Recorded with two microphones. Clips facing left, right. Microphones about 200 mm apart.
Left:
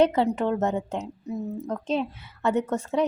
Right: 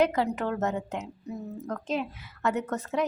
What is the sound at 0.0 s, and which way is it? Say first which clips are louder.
A woman's voice: left 4 dB; 30° left (ahead or behind).